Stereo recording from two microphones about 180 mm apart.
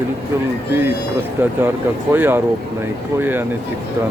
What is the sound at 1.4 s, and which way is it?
Speech, 15° right (ahead or behind).